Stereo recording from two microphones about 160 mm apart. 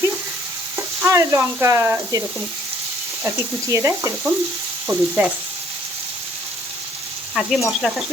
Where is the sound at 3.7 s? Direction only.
20° right (ahead or behind).